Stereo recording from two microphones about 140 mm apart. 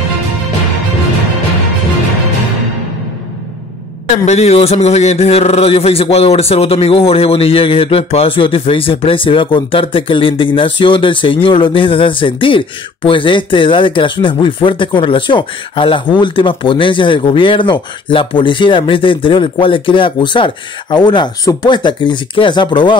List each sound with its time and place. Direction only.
4.3 s speech: 50° left (ahead or behind)